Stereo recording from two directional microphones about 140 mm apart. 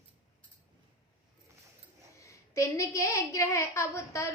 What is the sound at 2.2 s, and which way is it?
Speech, 20° left (ahead or behind).